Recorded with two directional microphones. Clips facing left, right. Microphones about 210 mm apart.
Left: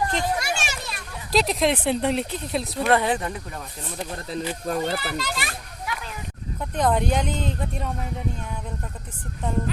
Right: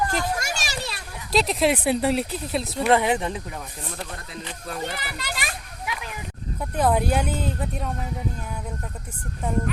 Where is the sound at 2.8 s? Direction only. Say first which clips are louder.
Right 2 dB; 15° right (ahead or behind).